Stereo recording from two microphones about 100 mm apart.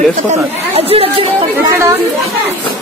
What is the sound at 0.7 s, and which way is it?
Speech, 75° right (ahead or behind).